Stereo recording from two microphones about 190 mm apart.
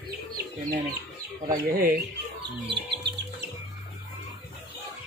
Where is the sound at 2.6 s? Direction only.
65° right (ahead or behind).